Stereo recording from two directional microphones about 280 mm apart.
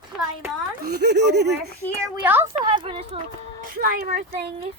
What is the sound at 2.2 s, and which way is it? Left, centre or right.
Speech, centre.